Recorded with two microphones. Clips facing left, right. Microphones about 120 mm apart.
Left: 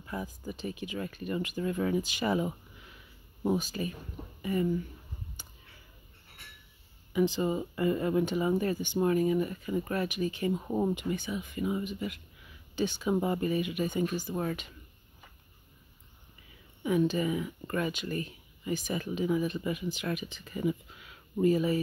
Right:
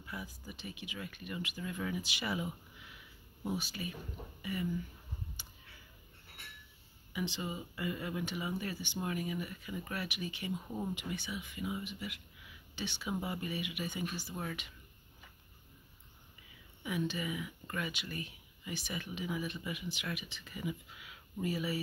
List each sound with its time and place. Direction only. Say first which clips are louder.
0.0 s speech: left 8 dB; 40° left (ahead or behind)
5.4 s a sound: left 2 dB; 45° left (ahead or behind)
7.1 s speech: left 11 dB; 45° left (ahead or behind)
16.8 s speech: left 9 dB; 45° left (ahead or behind)